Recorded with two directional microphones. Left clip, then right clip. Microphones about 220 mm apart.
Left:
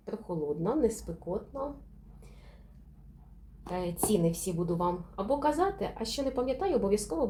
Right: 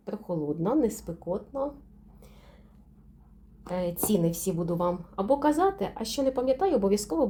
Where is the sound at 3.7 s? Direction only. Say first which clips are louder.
Right 2 dB; 45° right (ahead or behind).